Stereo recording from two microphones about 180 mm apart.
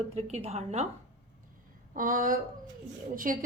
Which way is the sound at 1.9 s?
50° right (ahead or behind).